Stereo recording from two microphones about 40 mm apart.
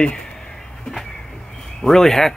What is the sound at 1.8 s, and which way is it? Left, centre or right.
Speech, centre.